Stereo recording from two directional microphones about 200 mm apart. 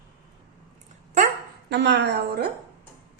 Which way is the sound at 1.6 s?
60° right (ahead or behind).